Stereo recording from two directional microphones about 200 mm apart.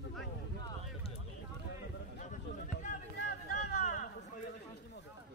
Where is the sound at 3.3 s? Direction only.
40° left (ahead or behind).